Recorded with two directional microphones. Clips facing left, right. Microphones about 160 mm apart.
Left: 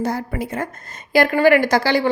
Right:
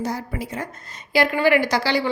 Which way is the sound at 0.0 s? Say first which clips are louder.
Left 4 dB; 55° left (ahead or behind).